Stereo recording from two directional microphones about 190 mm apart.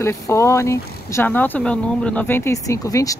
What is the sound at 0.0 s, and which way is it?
Speech, 15° left (ahead or behind).